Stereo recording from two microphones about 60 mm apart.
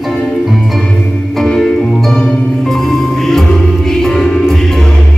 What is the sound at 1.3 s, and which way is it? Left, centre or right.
Music, centre.